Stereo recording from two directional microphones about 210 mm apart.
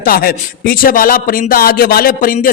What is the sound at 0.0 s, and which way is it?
Speech, 45° left (ahead or behind).